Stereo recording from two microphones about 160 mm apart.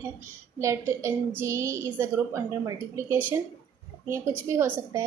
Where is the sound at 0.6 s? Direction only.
15° right (ahead or behind).